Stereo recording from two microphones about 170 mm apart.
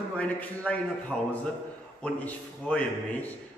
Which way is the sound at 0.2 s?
10° left (ahead or behind).